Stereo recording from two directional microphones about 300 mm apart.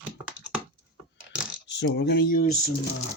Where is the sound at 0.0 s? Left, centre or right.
Centre.